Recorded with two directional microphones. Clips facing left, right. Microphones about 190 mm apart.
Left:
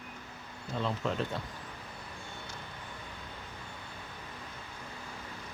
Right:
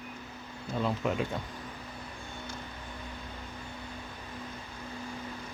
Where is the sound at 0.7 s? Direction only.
10° right (ahead or behind).